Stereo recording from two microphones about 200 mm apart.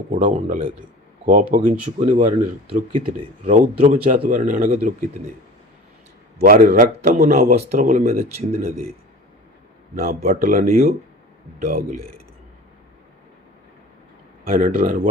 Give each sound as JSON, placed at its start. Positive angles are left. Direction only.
{"t": 0.3, "sound": "speech", "side_deg": -40}
{"t": 6.4, "sound": "a man's voice", "side_deg": -45}
{"t": 9.9, "sound": "a man's voice", "side_deg": -50}
{"t": 14.4, "sound": "speech", "side_deg": -40}